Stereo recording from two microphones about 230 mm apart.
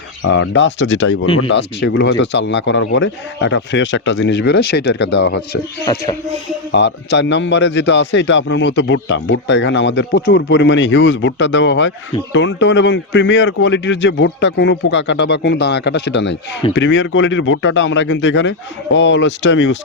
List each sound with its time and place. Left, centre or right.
0.2 s a man's voice: left
5.8 s music: centre
6.7 s a man's voice: left